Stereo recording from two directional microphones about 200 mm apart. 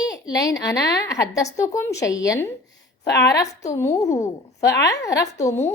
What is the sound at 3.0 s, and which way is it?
Speech, 55° left (ahead or behind).